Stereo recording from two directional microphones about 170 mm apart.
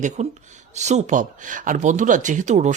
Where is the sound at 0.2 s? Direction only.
40° right (ahead or behind).